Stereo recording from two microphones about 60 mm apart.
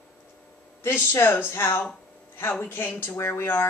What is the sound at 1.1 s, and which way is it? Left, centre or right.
A woman's voice, left.